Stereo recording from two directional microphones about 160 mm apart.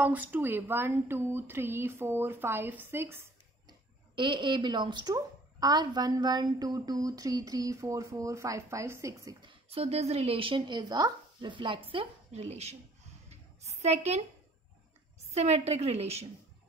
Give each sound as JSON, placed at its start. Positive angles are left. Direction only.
{"t": 0.0, "sound": "speech", "side_deg": -10}
{"t": 3.6, "sound": "speech", "side_deg": -30}
{"t": 13.3, "sound": "a sound", "side_deg": -40}
{"t": 15.3, "sound": "a woman's voice", "side_deg": -40}